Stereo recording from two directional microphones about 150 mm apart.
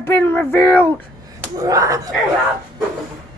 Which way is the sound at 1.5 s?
20° right (ahead or behind).